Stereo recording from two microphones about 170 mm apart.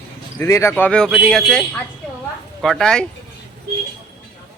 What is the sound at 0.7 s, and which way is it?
Speech, 5° left (ahead or behind).